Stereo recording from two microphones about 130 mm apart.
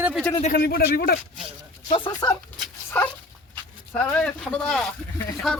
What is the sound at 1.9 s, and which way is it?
Speech, 30° left (ahead or behind).